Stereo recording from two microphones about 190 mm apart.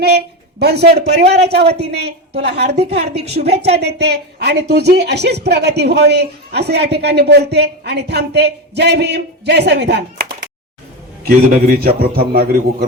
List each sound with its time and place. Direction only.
0.0 s a woman's voice: 60° right (ahead or behind)
11.3 s a man's voice: 50° right (ahead or behind)